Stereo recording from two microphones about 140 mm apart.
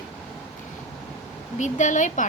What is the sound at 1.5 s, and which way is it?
Speech, 60° left (ahead or behind).